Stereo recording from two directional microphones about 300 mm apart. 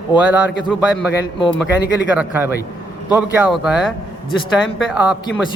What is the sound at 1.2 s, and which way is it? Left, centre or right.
Speech, centre.